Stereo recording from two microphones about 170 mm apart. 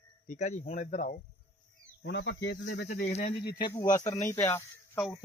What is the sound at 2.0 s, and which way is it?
Speech, 90° left.